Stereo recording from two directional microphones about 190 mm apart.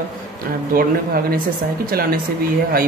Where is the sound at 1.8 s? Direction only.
50° right (ahead or behind).